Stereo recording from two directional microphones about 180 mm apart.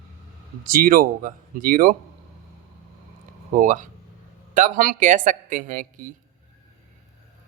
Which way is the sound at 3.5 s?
45° right (ahead or behind).